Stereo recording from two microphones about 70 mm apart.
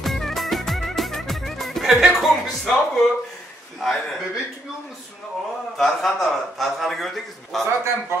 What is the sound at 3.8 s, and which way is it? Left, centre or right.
Speech, centre.